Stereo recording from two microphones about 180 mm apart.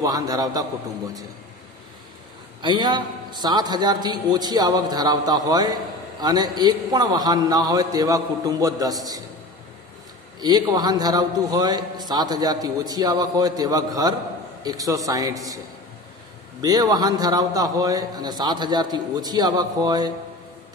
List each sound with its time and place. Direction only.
0.0 s a man's voice: 20° right (ahead or behind)
2.6 s a man's voice: 25° right (ahead or behind)
10.4 s a man's voice: 20° right (ahead or behind)
16.6 s a man's voice: 20° right (ahead or behind)